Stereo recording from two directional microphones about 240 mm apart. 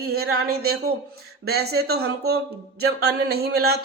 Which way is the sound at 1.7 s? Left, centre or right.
Right.